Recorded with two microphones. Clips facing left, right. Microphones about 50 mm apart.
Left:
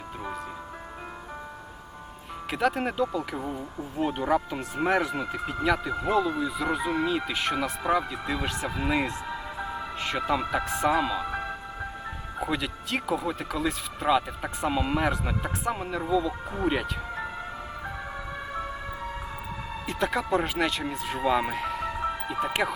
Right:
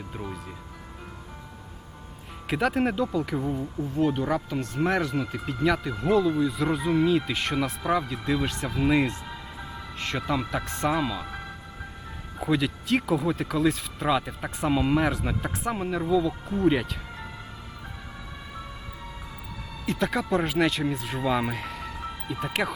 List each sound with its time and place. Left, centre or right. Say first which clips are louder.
2.5 s speech: right 2 dB; centre
4.1 s speech: left 1 dB; centre
11.3 s music: left 6 dB; left
12.4 s speech: right 4 dB; centre
19.8 s speech: right 1 dB; centre